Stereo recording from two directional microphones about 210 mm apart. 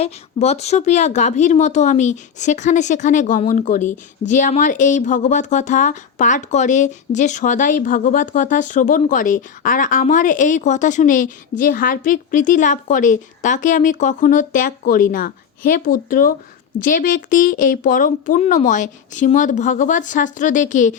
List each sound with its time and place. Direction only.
0.0 s speech: 30° left (ahead or behind)